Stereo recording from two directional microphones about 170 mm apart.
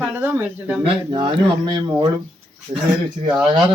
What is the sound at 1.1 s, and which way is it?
Speech, 30° right (ahead or behind).